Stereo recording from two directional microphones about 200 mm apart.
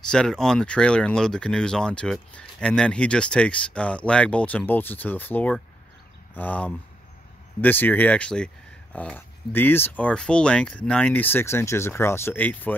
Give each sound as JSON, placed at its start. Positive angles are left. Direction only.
{"t": 0.1, "sound": "speech", "side_deg": 5}